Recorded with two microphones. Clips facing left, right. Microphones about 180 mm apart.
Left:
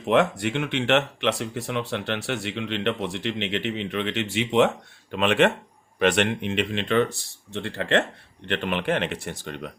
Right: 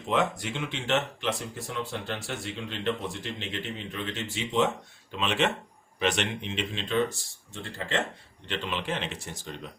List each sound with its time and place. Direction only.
0.0 s speech: 65° left (ahead or behind)
8.4 s speech: 60° left (ahead or behind)